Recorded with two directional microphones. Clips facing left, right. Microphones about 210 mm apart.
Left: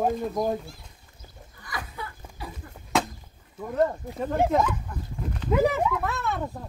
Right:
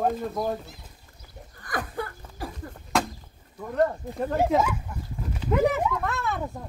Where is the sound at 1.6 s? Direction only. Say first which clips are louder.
Right 6 dB; 50° right (ahead or behind).